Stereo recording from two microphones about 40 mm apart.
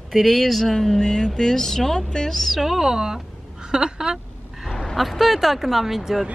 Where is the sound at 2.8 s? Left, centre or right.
Centre.